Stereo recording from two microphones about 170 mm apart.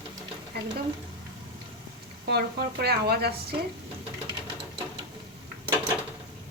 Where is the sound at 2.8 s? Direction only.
70° right (ahead or behind).